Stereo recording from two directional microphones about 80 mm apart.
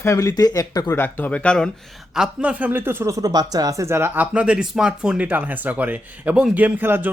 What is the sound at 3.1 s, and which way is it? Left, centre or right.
Speech, right.